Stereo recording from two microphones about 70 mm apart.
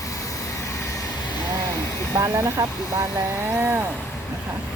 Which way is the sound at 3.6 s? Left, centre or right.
Right.